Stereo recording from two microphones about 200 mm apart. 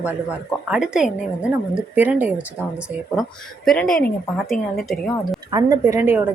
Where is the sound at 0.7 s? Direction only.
5° right (ahead or behind).